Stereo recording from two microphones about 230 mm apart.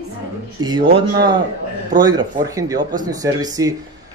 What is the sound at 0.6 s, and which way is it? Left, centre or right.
Speech, centre.